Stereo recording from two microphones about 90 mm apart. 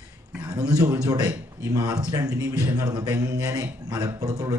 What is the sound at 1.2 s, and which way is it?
A man's voice, 30° right (ahead or behind).